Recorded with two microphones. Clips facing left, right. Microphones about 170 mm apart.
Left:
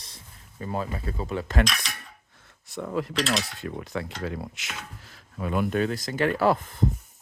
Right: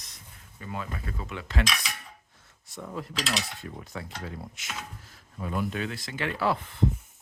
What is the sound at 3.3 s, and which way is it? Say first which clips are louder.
Dishes: left 5 dB; 80° left.